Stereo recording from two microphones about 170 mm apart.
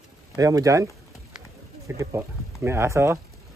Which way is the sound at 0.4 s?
20° right (ahead or behind).